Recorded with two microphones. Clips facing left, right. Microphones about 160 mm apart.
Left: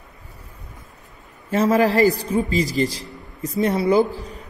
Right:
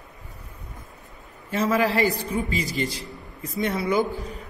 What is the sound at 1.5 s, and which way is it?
A man's voice, 40° left (ahead or behind).